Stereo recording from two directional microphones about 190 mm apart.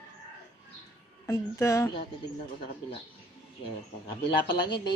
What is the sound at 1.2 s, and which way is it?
Speech, 15° left (ahead or behind).